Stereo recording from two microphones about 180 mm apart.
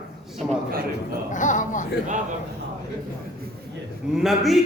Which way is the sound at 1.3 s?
45° left (ahead or behind).